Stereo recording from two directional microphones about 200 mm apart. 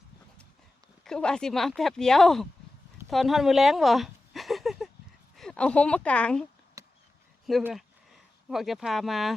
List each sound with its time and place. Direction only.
1.0 s speech: 5° left (ahead or behind)
3.1 s a sound: centre (ahead or behind)
5.4 s speech: 5° left (ahead or behind)
6.8 s chop: 15° right (ahead or behind)
7.4 s speech: centre (ahead or behind)